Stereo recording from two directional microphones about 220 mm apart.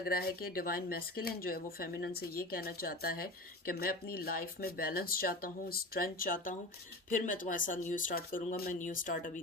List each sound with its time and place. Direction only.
0.0 s speech: 40° left (ahead or behind)